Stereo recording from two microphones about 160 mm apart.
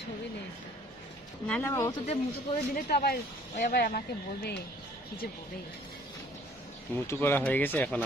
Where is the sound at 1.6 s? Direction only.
20° left (ahead or behind).